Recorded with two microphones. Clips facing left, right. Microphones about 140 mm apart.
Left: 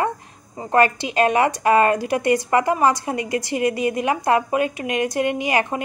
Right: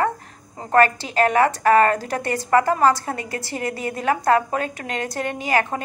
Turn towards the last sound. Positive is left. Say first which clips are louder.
# left 1 dB
turn(degrees=15)  # may be behind; listen again after turning